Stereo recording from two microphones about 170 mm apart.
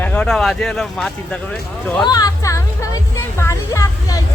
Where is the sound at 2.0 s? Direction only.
20° left (ahead or behind).